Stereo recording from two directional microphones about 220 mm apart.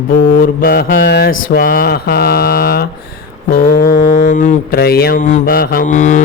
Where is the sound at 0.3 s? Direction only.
40° left (ahead or behind).